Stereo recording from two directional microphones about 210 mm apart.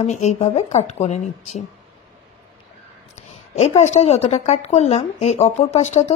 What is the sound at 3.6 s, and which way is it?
A woman's voice, 30° left (ahead or behind).